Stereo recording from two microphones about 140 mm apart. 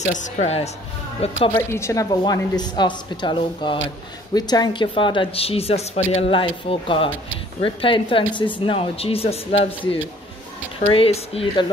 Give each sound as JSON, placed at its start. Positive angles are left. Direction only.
{"t": 0.0, "sound": "speech", "side_deg": 60}
{"t": 1.5, "sound": "speech", "side_deg": 20}